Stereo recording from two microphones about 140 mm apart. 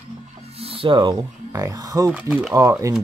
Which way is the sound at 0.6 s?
40° right (ahead or behind).